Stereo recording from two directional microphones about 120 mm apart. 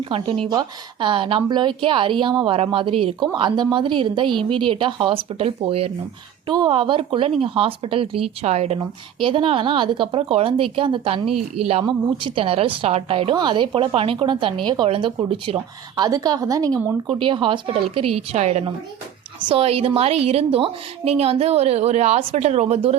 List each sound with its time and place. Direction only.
0.5 s a woman's voice: 40° right (ahead or behind)
8.4 s a woman's voice: 60° right (ahead or behind)
8.8 s a woman's voice: 45° right (ahead or behind)
13.3 s a woman's voice: 40° right (ahead or behind)
16.0 s a woman's voice: 30° right (ahead or behind)
17.1 s a woman's voice: 45° right (ahead or behind); by 18.6 s 65° right (ahead or behind)
19.5 s a woman's voice: 55° right (ahead or behind)